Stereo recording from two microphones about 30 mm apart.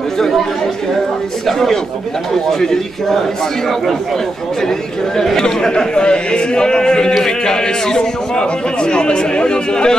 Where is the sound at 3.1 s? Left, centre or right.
Centre.